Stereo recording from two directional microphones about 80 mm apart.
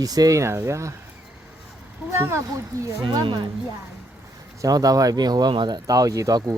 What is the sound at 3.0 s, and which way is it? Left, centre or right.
Speech, right.